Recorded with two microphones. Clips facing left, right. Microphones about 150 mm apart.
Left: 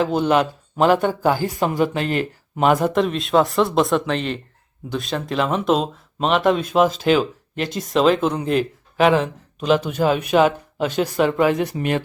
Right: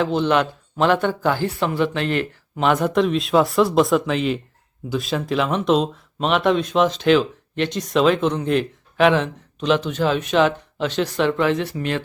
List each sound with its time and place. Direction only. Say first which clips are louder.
0.0 s speech: left 1 dB; 45° left (ahead or behind)
0.9 s speech: left 2 dB; 10° left (ahead or behind)
1.8 s speech: even; 40° left (ahead or behind)
2.7 s speech: right 1 dB; centre (ahead or behind)